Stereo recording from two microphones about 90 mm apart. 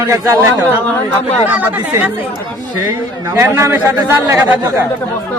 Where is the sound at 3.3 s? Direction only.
30° right (ahead or behind).